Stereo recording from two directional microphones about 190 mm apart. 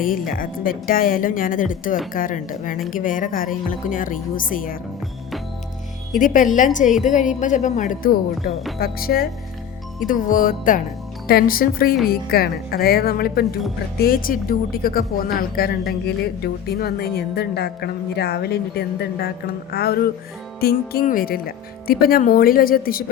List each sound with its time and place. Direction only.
0.0 s speech: 45° left (ahead or behind)
6.1 s speech: 45° left (ahead or behind)
7.0 s music: 40° left (ahead or behind)
8.8 s a woman's voice: 50° left (ahead or behind)